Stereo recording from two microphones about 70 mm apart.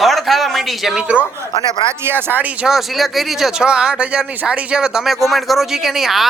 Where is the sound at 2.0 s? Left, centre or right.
Right.